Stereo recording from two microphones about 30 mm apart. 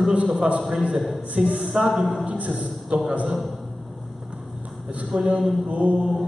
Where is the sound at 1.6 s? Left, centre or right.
Centre.